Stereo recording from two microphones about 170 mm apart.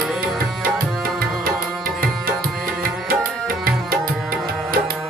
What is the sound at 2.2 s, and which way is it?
Tabla, 60° right (ahead or behind).